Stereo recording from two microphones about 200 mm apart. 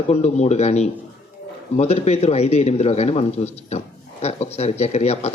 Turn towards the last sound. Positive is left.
turn(degrees=30)  # may be behind; listen again after turning